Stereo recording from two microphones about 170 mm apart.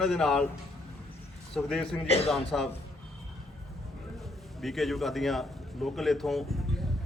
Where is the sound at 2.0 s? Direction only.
40° left (ahead or behind).